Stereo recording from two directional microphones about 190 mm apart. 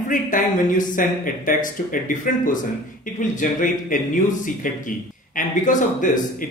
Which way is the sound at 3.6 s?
45° left (ahead or behind).